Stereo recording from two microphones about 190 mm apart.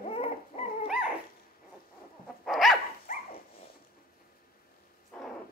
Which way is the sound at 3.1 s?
45° left (ahead or behind).